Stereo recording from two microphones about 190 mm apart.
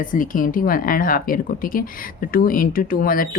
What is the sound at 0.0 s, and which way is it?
Speech, 45° left (ahead or behind).